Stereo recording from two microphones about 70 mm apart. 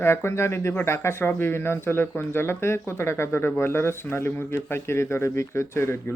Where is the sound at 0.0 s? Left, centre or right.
Left.